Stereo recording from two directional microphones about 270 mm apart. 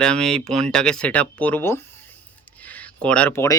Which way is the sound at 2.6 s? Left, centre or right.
Centre.